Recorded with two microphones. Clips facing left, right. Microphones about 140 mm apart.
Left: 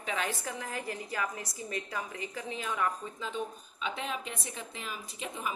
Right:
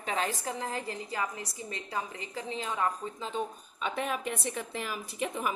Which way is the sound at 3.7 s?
50° right (ahead or behind).